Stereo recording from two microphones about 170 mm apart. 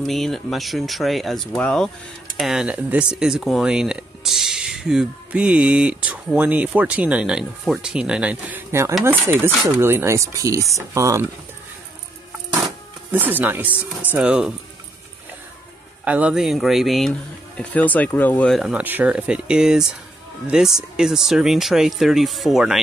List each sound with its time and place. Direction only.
0.0 s speech: centre (ahead or behind); by 11.2 s 20° right (ahead or behind)
13.1 s speech: 10° right (ahead or behind)
16.0 s speech: 5° right (ahead or behind)